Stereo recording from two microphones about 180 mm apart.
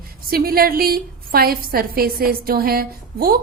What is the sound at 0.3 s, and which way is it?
A woman's voice, 55° right (ahead or behind).